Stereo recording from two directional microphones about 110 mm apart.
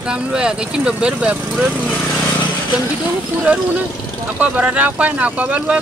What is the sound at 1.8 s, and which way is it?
Speech, 10° left (ahead or behind).